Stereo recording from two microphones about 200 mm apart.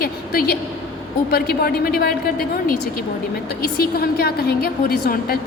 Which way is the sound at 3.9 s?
50° left (ahead or behind).